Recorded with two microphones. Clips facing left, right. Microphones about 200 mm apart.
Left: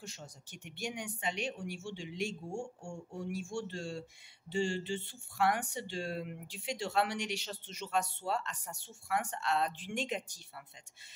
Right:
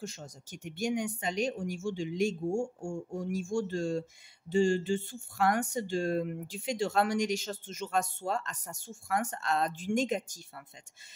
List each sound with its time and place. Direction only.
0.0 s speech: 45° right (ahead or behind)